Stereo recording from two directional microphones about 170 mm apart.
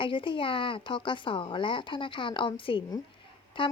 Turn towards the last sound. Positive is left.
turn(degrees=30)  # may be behind; listen again after turning